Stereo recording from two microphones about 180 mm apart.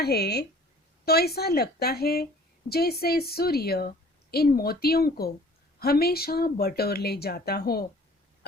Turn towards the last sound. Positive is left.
turn(degrees=60)  # may be behind; listen again after turning